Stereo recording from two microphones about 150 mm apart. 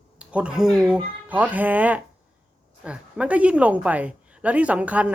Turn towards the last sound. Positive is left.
turn(degrees=-10)  # may be behind; listen again after turning